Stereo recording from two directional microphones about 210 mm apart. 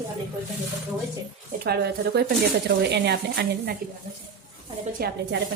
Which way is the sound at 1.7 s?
50° right (ahead or behind).